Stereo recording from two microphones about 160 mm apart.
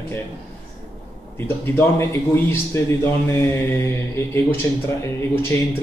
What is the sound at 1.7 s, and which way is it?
Speech, 15° left (ahead or behind).